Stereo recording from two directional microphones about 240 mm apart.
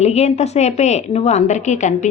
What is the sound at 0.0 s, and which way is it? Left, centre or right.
Speech, left.